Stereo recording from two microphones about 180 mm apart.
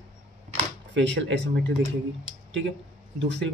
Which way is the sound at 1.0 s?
85° right.